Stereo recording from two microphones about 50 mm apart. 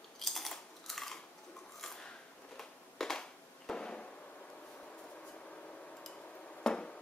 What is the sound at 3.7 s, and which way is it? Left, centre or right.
Fireworks, centre.